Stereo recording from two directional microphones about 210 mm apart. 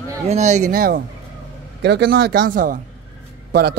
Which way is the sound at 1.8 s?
55° right (ahead or behind).